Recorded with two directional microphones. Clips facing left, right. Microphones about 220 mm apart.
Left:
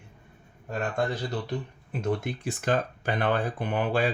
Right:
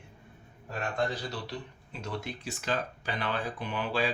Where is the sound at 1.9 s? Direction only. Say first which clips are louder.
Left 9 dB; 55° left (ahead or behind).